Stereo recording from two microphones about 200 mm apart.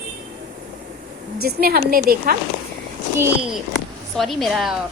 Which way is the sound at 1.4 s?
50° right (ahead or behind).